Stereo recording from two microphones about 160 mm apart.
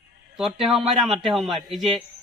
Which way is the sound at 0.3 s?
Centre (ahead or behind).